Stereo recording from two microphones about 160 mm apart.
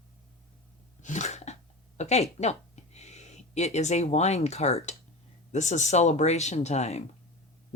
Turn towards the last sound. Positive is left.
turn(degrees=45)  # may be behind; listen again after turning